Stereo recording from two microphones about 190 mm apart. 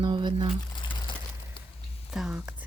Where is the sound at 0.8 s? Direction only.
25° left (ahead or behind).